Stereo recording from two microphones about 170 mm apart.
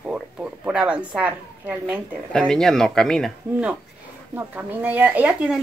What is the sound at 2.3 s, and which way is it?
A woman's voice, 5° left (ahead or behind).